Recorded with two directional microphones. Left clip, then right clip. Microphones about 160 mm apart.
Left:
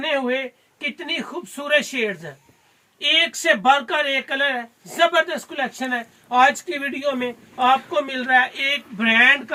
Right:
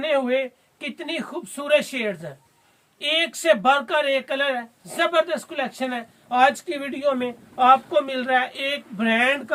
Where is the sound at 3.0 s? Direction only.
45° right (ahead or behind).